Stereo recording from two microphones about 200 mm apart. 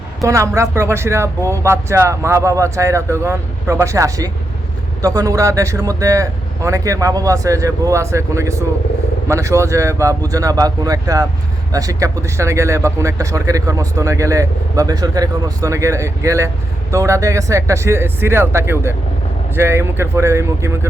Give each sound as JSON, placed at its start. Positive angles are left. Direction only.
{"t": 0.2, "sound": "speech", "side_deg": -15}